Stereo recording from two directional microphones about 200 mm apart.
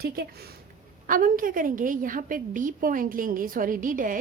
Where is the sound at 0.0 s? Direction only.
50° right (ahead or behind).